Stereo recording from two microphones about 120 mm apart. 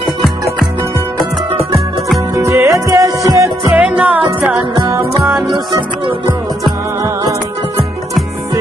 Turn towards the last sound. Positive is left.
turn(degrees=-25)  # may be behind; listen again after turning